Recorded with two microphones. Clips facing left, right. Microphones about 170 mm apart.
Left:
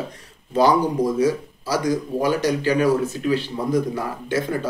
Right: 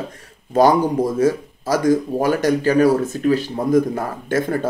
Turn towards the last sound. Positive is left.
turn(degrees=-50)  # may be behind; listen again after turning